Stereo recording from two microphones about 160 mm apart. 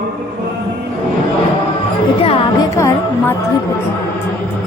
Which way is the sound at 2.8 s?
20° left (ahead or behind).